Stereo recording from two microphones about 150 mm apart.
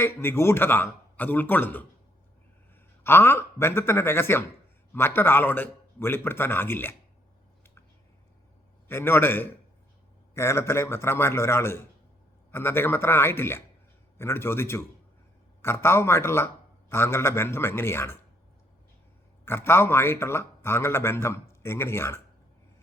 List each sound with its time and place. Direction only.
0.0 s a man's voice: 15° left (ahead or behind)
3.0 s a man's voice: 15° left (ahead or behind)
8.9 s a man's voice: 15° left (ahead or behind)
19.5 s a man's voice: 15° left (ahead or behind)